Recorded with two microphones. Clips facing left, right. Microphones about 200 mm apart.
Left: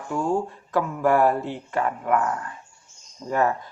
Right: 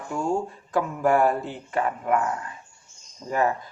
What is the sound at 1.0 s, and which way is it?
Speech, 30° right (ahead or behind).